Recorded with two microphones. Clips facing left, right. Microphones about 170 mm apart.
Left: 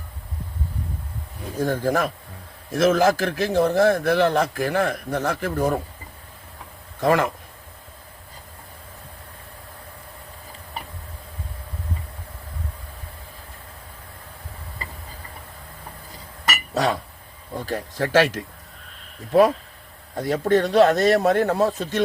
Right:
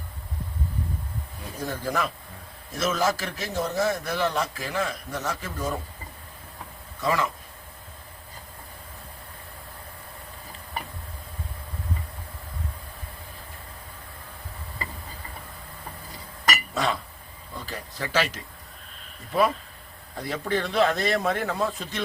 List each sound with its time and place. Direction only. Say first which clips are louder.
1.5 s a man's voice: left 7 dB; 50° left (ahead or behind)
7.0 s a man's voice: left 6 dB; 55° left (ahead or behind)
16.7 s speech: left 9 dB; 40° left (ahead or behind)
19.3 s a man's voice: left 7 dB; 45° left (ahead or behind)